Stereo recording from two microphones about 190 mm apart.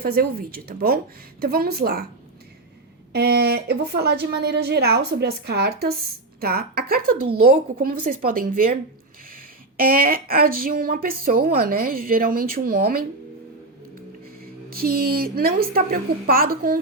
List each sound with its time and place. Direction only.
0.0 s speech: 50° right (ahead or behind)
3.1 s a woman's voice: 55° right (ahead or behind)
14.4 s speech: 50° right (ahead or behind)